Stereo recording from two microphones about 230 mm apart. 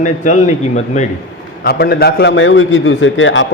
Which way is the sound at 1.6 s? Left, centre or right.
Left.